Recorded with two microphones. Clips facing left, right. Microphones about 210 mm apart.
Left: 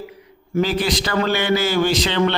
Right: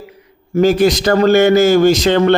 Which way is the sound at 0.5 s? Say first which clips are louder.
Right 8 dB; 45° right (ahead or behind).